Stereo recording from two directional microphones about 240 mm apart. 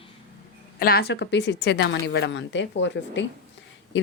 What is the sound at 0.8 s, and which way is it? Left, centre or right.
A woman's voice, left.